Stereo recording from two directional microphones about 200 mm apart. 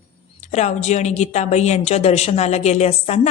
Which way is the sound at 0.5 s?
35° left (ahead or behind).